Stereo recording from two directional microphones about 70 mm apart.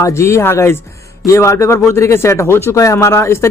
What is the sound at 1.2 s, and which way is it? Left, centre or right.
Speech, left.